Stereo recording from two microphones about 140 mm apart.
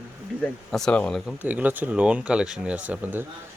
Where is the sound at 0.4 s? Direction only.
5° left (ahead or behind).